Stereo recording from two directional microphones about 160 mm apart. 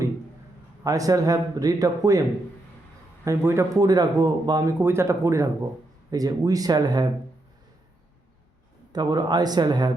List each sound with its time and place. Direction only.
0.9 s speech: 20° right (ahead or behind)
3.2 s speech: 15° right (ahead or behind)
8.9 s speech: 25° right (ahead or behind)